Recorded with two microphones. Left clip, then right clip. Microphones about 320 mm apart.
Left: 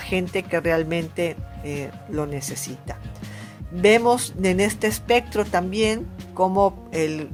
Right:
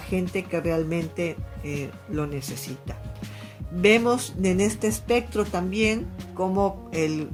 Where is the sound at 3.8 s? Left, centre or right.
Left.